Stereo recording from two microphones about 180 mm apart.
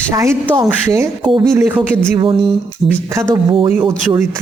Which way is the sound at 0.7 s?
15° right (ahead or behind).